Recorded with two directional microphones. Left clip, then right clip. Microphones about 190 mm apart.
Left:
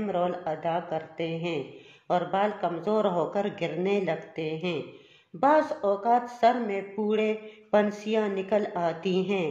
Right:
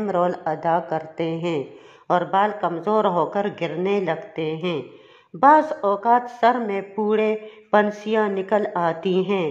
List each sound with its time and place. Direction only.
0.0 s speech: 35° right (ahead or behind)